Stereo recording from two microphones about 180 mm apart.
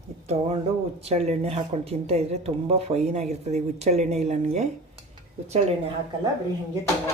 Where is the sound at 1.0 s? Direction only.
35° right (ahead or behind).